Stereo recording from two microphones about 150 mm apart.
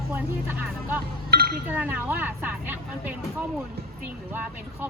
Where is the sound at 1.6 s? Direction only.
10° right (ahead or behind).